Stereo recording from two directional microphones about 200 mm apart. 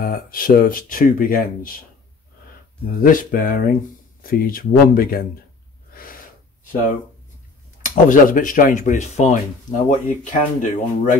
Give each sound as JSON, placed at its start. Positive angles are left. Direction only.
{"t": 0.0, "sound": "speech", "side_deg": 45}
{"t": 3.0, "sound": "speech", "side_deg": 45}
{"t": 7.8, "sound": "speech", "side_deg": 40}